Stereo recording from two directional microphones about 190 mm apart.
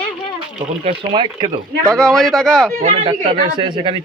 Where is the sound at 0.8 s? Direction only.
25° right (ahead or behind).